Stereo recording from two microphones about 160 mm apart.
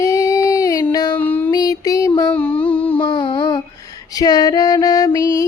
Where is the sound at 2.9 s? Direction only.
30° left (ahead or behind).